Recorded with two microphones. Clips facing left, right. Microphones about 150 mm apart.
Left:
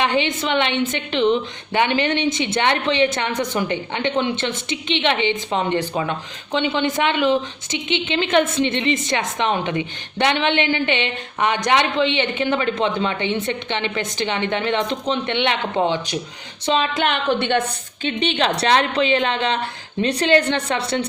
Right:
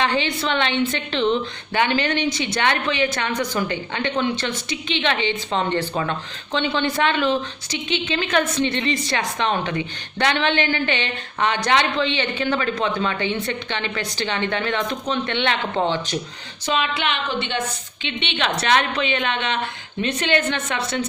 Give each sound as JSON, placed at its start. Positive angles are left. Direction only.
{"t": 0.0, "sound": "a woman's voice", "side_deg": 20}
{"t": 16.6, "sound": "a woman's voice", "side_deg": 30}
{"t": 16.9, "sound": "a woman's voice", "side_deg": 50}
{"t": 18.2, "sound": "a woman's voice", "side_deg": 35}